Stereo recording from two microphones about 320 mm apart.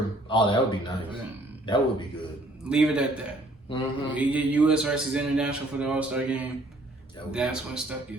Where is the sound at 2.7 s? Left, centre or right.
Centre.